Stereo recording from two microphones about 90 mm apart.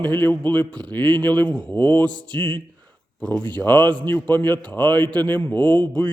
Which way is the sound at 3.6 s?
20° left (ahead or behind).